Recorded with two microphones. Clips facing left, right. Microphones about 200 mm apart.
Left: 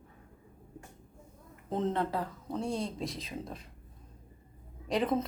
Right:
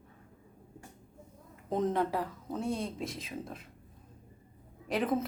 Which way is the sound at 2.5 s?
30° left (ahead or behind).